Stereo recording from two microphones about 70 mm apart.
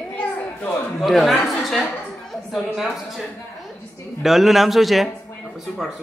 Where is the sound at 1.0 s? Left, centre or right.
Centre.